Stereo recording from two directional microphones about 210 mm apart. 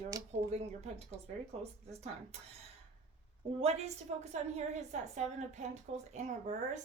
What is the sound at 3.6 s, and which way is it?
A woman's voice, 30° right (ahead or behind).